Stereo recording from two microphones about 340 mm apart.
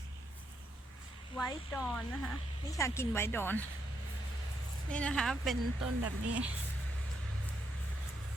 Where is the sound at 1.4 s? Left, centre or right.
Centre.